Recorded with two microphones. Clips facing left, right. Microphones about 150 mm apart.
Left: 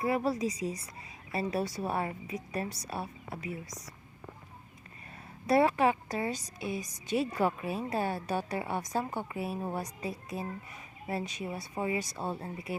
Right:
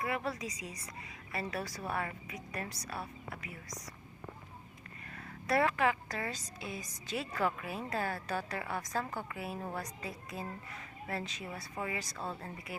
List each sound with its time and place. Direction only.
0.0 s speech: 30° left (ahead or behind)
5.1 s speech: 25° left (ahead or behind)